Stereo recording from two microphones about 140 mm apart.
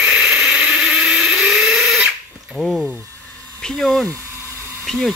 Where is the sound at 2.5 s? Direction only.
Centre (ahead or behind).